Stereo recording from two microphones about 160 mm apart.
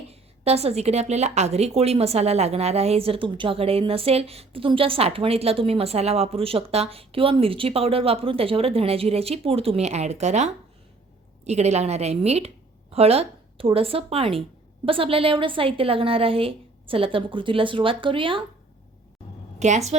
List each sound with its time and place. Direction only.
0.1 s a woman's voice: 40° right (ahead or behind)
19.5 s a woman's voice: 45° right (ahead or behind)